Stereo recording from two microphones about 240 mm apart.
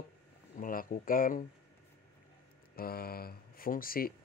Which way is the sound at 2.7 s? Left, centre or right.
Left.